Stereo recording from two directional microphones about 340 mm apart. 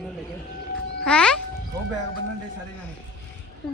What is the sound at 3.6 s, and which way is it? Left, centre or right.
Speech, centre.